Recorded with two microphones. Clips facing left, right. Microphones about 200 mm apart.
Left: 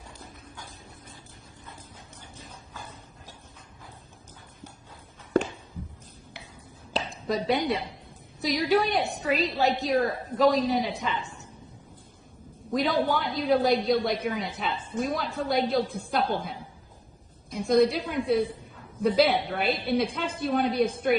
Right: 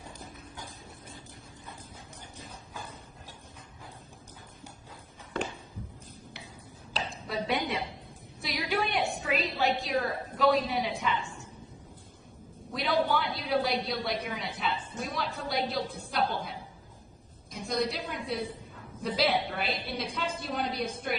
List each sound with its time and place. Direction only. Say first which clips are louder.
7.3 s a woman's voice: left 6 dB; 35° left (ahead or behind)
12.7 s a woman's voice: left 3 dB; 45° left (ahead or behind)
17.7 s a woman's voice: left 10 dB; 55° left (ahead or behind)